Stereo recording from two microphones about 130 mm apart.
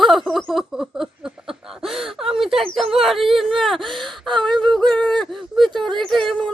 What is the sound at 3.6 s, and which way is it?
Gasp, centre (ahead or behind).